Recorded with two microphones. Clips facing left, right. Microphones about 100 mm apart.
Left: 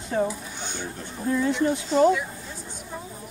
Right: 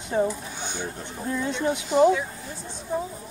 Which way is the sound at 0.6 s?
15° right (ahead or behind).